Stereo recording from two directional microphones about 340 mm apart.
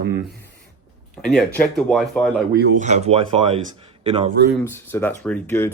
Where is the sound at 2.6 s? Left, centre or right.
Right.